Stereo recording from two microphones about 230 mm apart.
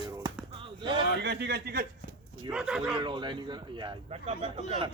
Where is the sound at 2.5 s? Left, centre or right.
Centre.